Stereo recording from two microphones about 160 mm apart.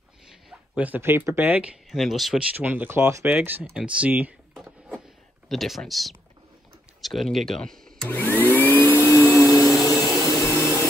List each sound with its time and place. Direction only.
0.3 s speech: 5° right (ahead or behind)
1.9 s speech: centre (ahead or behind)
5.5 s speech: centre (ahead or behind)
8.5 s vacuum cleaner: 10° left (ahead or behind)
10.4 s jet engine: 20° left (ahead or behind)